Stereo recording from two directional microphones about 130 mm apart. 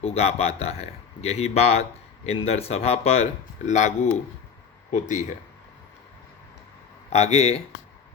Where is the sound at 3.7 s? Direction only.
65° left (ahead or behind).